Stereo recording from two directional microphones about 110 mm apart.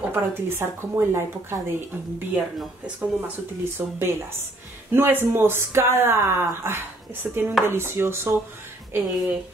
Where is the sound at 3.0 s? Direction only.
15° right (ahead or behind).